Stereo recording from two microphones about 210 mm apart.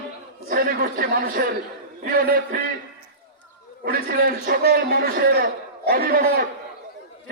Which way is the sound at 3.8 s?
45° right (ahead or behind).